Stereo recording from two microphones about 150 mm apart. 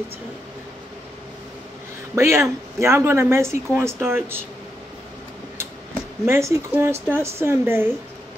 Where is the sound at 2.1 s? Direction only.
20° right (ahead or behind).